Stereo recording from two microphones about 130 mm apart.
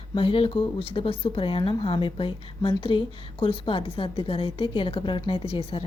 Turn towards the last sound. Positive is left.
turn(degrees=50)  # may be behind; listen again after turning